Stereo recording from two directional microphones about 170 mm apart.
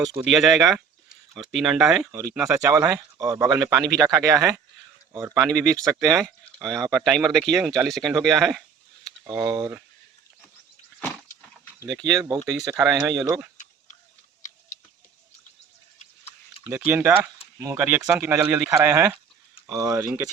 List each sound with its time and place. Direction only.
0.2 s speech: centre (ahead or behind)
2.6 s speech: 20° right (ahead or behind)
6.0 s speech: centre (ahead or behind)
9.2 s speech: 20° right (ahead or behind)
11.8 s speech: 20° right (ahead or behind)
16.6 s speech: 10° right (ahead or behind)